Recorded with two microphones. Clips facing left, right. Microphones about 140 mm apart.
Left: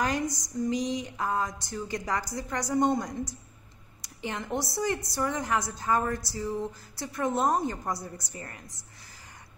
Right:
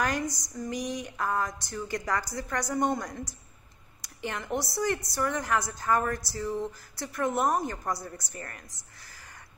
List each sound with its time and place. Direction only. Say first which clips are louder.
0.0 s speech: left 1 dB; 20° left (ahead or behind)
4.0 s a sound: even; 20° left (ahead or behind)
4.5 s a woman's voice: right 1 dB; 20° right (ahead or behind)
5.1 s speech: even; 20° left (ahead or behind)